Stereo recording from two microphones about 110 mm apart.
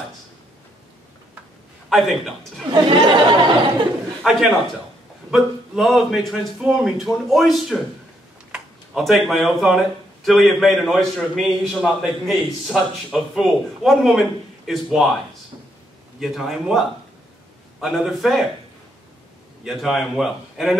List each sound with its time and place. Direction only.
1.9 s speech: centre (ahead or behind)
2.7 s a sound: 50° right (ahead or behind)
4.2 s a man's voice: centre (ahead or behind)
16.2 s speech: centre (ahead or behind)
19.6 s speech: centre (ahead or behind)